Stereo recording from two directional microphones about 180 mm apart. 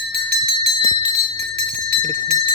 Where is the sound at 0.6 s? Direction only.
35° right (ahead or behind).